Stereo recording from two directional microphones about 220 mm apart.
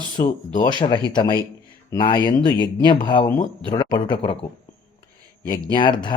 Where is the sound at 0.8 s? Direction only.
20° left (ahead or behind).